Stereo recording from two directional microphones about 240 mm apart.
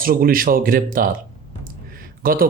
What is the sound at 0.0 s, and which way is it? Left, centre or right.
A man's voice, right.